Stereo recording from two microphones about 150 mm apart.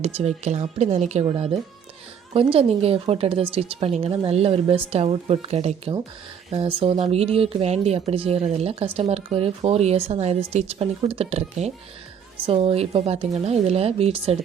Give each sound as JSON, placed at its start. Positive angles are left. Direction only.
{"t": 0.0, "sound": "a woman's voice", "side_deg": -45}